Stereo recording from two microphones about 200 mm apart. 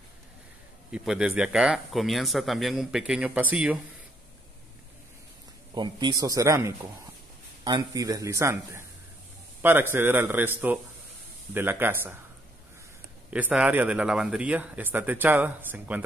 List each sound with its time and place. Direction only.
0.9 s speech: 5° right (ahead or behind)
5.8 s a man's voice: 20° right (ahead or behind)
13.3 s a man's voice: 5° right (ahead or behind)